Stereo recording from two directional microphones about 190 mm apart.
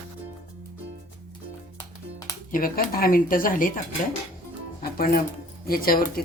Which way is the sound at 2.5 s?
50° left (ahead or behind).